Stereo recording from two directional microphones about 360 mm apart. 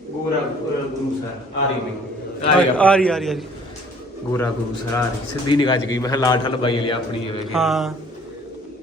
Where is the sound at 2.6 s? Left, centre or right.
Centre.